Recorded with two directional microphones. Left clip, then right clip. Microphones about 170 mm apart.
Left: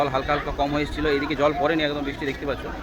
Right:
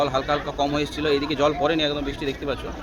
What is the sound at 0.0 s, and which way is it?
Speech, 15° right (ahead or behind).